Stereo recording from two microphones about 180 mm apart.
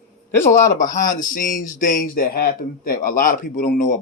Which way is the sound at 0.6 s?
45° left (ahead or behind).